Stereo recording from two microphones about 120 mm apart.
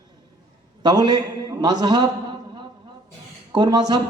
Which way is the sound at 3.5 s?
35° right (ahead or behind).